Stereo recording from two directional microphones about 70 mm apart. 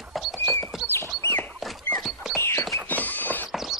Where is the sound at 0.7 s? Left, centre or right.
Centre.